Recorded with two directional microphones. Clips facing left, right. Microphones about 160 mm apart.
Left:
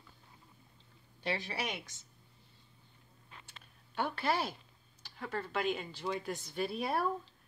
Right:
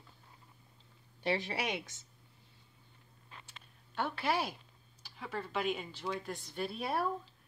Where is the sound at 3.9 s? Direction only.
5° right (ahead or behind).